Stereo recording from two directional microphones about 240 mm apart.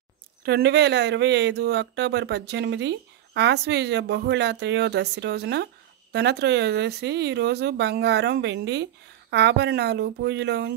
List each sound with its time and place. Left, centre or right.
0.4 s speech: right